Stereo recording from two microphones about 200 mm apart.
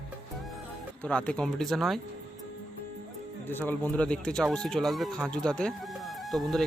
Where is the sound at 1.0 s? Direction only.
5° left (ahead or behind).